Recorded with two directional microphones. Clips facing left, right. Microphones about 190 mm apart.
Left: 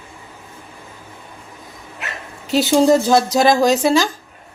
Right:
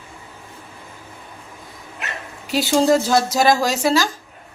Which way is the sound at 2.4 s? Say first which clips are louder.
Left 3 dB; 25° left (ahead or behind).